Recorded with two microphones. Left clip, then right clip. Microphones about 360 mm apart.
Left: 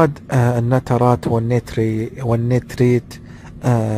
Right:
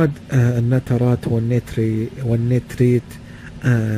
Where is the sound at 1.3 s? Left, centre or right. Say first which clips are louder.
Left 3 dB; left.